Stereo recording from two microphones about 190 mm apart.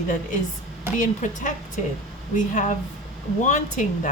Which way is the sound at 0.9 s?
40° left (ahead or behind).